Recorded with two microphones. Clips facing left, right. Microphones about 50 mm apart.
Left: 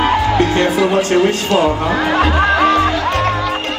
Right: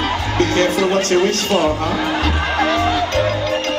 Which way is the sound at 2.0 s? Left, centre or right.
Left.